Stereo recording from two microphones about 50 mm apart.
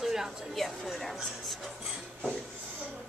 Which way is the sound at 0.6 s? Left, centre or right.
Centre.